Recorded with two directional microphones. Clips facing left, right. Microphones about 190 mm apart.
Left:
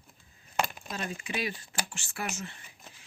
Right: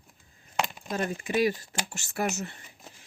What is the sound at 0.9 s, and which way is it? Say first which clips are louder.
Speech: right 7 dB; 45° right (ahead or behind).